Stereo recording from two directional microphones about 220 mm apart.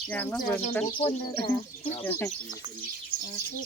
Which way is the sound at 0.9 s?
20° left (ahead or behind).